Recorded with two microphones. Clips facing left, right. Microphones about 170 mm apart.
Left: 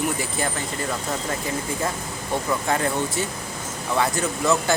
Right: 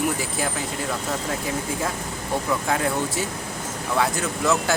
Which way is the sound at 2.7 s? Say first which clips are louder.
Even; centre (ahead or behind).